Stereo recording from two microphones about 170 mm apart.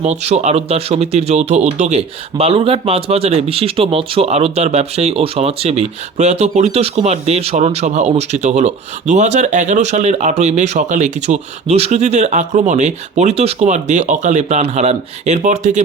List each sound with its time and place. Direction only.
0.0 s speech: 40° right (ahead or behind)